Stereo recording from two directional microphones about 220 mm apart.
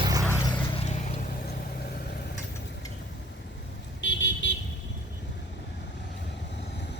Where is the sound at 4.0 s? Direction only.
55° left (ahead or behind).